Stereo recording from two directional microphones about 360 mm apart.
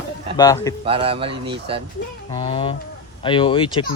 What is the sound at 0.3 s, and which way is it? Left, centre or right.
Speech, centre.